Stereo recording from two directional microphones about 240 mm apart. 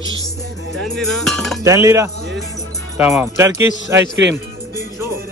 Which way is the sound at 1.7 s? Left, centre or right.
Centre.